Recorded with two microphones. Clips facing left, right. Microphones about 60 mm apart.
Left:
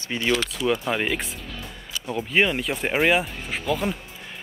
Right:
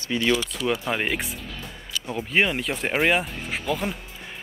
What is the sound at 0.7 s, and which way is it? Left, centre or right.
Speech, centre.